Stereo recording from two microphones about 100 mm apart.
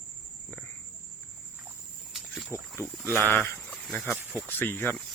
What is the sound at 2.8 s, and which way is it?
Speech, 30° left (ahead or behind).